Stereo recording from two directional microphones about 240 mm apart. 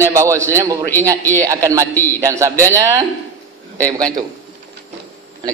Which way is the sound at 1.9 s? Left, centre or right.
Centre.